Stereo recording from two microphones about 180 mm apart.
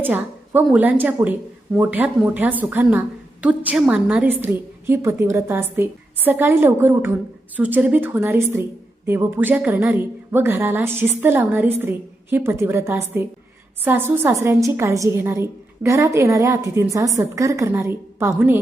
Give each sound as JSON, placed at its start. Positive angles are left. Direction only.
{"t": 0.0, "sound": "a woman's voice", "side_deg": -10}